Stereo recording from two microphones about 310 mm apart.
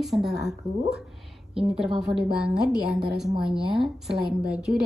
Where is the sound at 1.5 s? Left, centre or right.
Centre.